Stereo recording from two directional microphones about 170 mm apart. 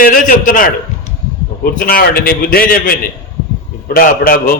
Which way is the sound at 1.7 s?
55° left (ahead or behind).